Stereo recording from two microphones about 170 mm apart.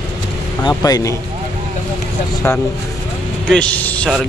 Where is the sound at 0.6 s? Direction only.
20° left (ahead or behind).